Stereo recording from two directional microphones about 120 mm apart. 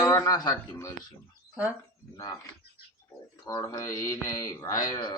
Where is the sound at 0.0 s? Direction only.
30° left (ahead or behind).